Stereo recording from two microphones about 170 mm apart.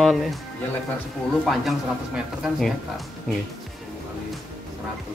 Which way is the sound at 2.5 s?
Centre (ahead or behind).